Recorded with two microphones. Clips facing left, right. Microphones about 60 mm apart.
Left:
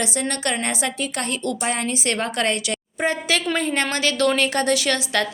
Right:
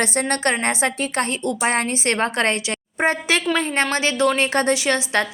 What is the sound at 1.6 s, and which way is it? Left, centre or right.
A woman's voice, right.